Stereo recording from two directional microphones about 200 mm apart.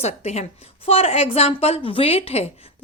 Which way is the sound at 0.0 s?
30° left (ahead or behind).